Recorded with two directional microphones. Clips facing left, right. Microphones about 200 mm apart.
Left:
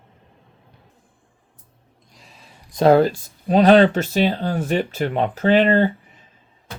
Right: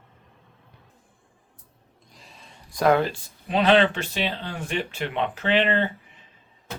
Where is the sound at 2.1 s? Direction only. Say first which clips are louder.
Left 1 dB; centre (ahead or behind).